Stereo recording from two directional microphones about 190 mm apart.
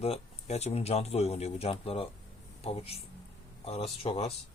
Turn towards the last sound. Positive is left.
turn(degrees=35)  # may be behind; listen again after turning